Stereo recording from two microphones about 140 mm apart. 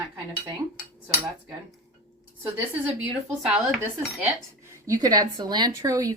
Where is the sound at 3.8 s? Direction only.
20° right (ahead or behind).